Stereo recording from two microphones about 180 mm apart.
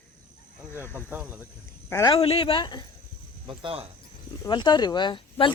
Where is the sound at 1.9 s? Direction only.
20° left (ahead or behind).